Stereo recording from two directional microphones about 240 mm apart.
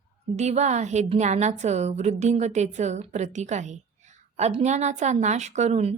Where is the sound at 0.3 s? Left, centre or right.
Right.